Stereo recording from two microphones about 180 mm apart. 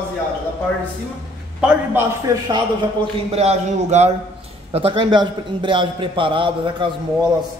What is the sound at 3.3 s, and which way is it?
A man's voice, 35° right (ahead or behind).